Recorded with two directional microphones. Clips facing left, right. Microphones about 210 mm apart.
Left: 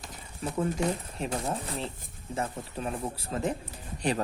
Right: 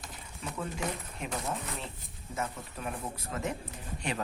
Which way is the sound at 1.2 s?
30° left (ahead or behind).